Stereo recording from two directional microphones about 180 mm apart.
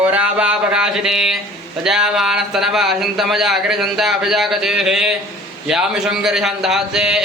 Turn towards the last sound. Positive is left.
turn(degrees=-5)  # may be behind; listen again after turning